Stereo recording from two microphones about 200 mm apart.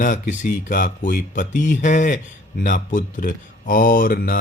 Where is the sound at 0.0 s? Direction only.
40° left (ahead or behind).